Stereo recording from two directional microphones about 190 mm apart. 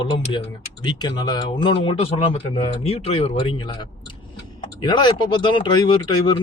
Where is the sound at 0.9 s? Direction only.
25° left (ahead or behind).